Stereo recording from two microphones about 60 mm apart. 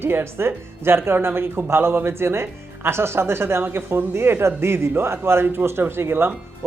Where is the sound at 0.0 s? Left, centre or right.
Right.